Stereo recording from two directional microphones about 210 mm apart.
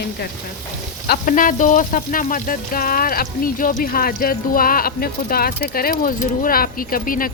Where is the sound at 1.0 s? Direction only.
45° left (ahead or behind).